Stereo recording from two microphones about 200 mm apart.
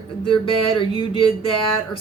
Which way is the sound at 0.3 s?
25° left (ahead or behind).